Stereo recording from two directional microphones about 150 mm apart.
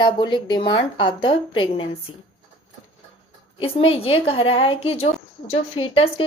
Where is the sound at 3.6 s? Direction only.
40° left (ahead or behind).